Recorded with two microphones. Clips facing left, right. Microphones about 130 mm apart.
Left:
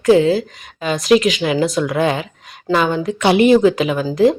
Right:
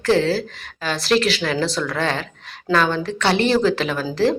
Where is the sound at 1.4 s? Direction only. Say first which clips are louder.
Left 5 dB; 15° left (ahead or behind).